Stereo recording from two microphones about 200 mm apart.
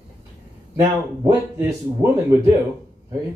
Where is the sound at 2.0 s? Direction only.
15° right (ahead or behind).